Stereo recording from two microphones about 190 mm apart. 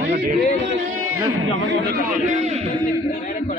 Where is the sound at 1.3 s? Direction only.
85° right.